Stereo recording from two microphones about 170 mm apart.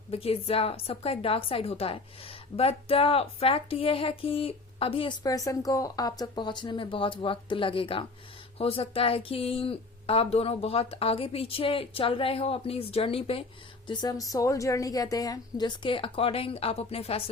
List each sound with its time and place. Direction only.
0.1 s a woman's voice: 35° left (ahead or behind)
5.2 s a woman's voice: 20° left (ahead or behind)